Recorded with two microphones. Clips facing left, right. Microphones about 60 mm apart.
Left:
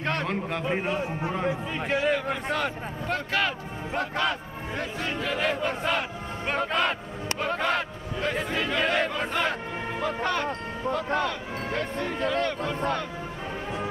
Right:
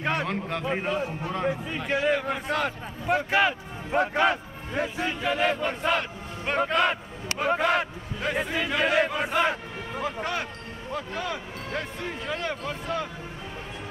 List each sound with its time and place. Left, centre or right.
0.0 s a sound: centre
0.3 s speech: centre
1.0 s speech: left
1.9 s speech: centre
3.1 s speech: centre
4.7 s speech: centre